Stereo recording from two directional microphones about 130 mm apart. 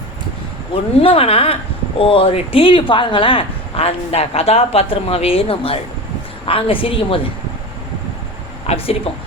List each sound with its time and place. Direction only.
1.0 s speech: 45° left (ahead or behind)
8.6 s speech: 50° left (ahead or behind)